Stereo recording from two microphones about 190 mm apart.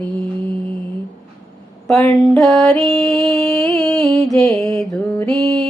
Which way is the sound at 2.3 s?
Centre (ahead or behind).